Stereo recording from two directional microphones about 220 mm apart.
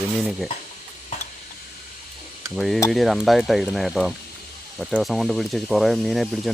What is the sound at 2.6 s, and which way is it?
Speech, centre (ahead or behind).